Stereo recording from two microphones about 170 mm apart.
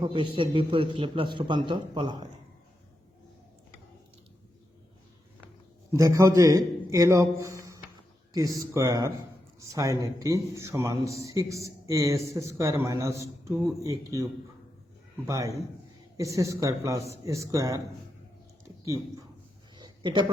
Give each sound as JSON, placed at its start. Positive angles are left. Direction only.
{"t": 0.0, "sound": "a man's voice", "side_deg": -30}
{"t": 5.9, "sound": "a man's voice", "side_deg": -20}
{"t": 15.3, "sound": "a man's voice", "side_deg": -20}
{"t": 19.7, "sound": "a sound", "side_deg": -25}